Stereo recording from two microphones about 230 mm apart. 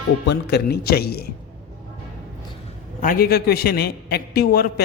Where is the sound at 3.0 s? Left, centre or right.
Left.